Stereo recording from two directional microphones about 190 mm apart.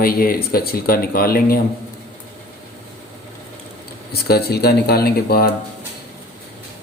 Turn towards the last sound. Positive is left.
turn(degrees=55)  # may be behind; listen again after turning